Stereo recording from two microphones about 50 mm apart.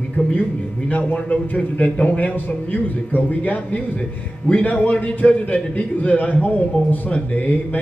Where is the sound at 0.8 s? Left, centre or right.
Left.